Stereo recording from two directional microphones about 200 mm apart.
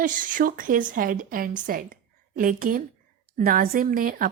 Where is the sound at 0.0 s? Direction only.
40° right (ahead or behind).